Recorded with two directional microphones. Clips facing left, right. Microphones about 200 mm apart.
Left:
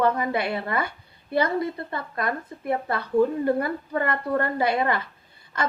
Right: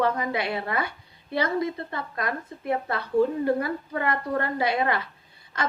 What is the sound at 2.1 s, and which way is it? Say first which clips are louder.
Speech: left 3 dB; 55° left (ahead or behind).